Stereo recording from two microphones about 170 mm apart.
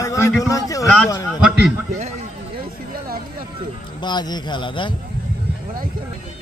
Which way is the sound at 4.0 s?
25° left (ahead or behind).